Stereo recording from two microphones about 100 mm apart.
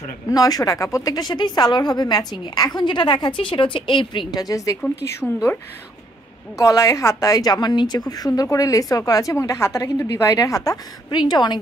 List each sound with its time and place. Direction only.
0.3 s speech: 40° left (ahead or behind)
5.2 s speech: 5° left (ahead or behind)
6.6 s a woman's voice: 30° left (ahead or behind)
11.1 s speech: 45° left (ahead or behind)